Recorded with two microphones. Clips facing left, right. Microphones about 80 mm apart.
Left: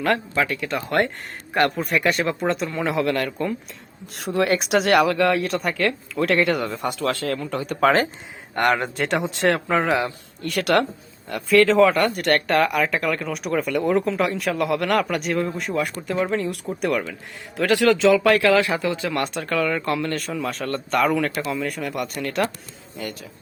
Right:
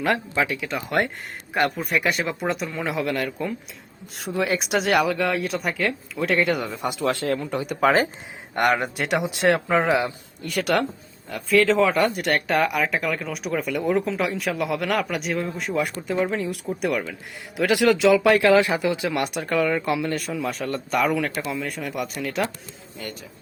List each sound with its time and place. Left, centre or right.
0.0 s speech: centre
7.0 s speech: right
7.7 s speech: centre
17.6 s speech: centre